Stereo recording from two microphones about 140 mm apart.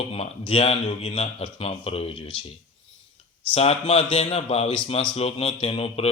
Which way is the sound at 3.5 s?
45° left (ahead or behind).